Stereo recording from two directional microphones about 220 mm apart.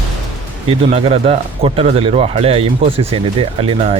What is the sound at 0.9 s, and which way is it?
Speech, 25° right (ahead or behind).